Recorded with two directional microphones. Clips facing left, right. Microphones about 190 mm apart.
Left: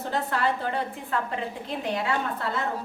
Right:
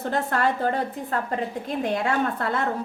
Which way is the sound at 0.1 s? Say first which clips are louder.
Right 2 dB; 50° right (ahead or behind).